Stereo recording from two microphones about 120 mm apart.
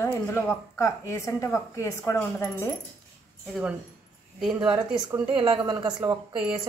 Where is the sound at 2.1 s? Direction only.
10° left (ahead or behind).